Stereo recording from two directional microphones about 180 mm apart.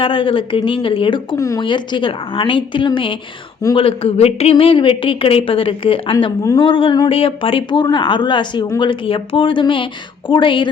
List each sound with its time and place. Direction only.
0.0 s speech: 30° left (ahead or behind)